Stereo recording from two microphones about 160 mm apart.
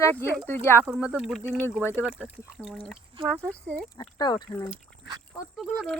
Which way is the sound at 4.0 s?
25° left (ahead or behind).